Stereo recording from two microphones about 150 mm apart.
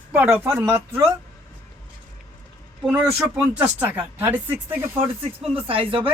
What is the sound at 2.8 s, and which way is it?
A woman's voice, 5° right (ahead or behind).